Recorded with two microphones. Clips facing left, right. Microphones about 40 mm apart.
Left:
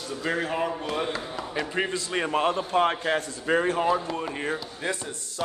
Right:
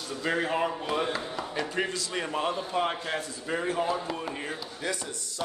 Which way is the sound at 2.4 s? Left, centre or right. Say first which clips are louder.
Left 5 dB; left.